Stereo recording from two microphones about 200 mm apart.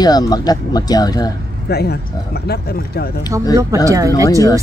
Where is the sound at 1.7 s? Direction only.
55° left (ahead or behind).